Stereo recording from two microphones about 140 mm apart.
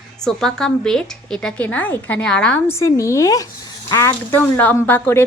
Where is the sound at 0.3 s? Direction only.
5° left (ahead or behind).